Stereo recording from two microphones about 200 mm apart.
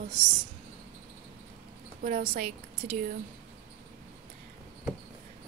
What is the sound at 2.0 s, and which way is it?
Speech, 45° right (ahead or behind).